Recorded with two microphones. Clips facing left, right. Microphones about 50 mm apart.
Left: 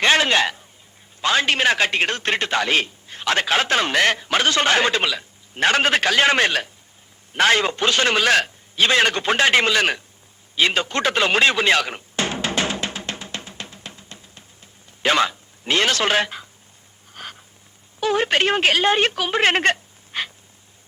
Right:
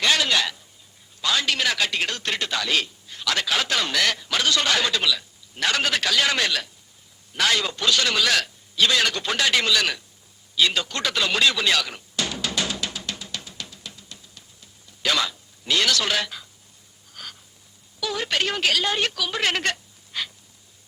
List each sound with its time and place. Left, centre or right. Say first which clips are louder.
0.0 s a man's voice: left 5 dB; left
10.5 s a sound: left 3 dB; left
18.0 s a woman's voice: left 7 dB; left